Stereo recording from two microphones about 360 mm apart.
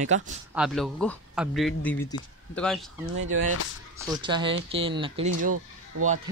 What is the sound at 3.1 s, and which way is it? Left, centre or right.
Speech, right.